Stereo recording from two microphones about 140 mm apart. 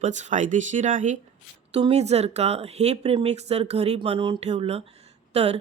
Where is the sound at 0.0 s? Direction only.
60° right (ahead or behind).